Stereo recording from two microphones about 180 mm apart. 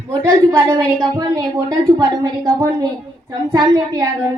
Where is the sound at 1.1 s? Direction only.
15° right (ahead or behind).